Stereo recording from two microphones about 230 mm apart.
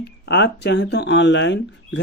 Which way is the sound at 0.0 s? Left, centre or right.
Left.